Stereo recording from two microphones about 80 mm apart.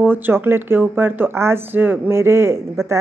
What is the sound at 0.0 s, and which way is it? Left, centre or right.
A woman's voice, right.